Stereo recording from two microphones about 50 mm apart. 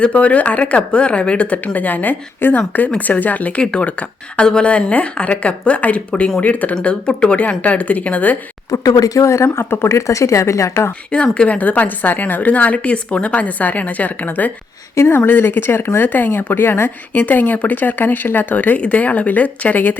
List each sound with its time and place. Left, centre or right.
0.0 s a woman's voice: left
3.6 s a woman's voice: left
6.8 s speech: centre
7.3 s a woman's voice: left
9.1 s speech: left
10.1 s a woman's voice: left
11.3 s a woman's voice: left
17.2 s a woman's voice: left